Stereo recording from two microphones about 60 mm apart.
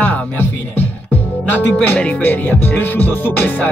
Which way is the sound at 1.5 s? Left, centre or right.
Left.